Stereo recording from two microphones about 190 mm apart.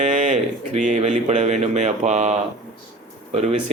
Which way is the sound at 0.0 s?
35° right (ahead or behind).